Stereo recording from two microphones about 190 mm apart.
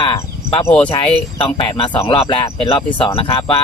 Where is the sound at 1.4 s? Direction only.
25° left (ahead or behind).